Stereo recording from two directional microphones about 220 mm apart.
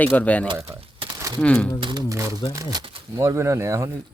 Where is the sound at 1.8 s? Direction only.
15° right (ahead or behind).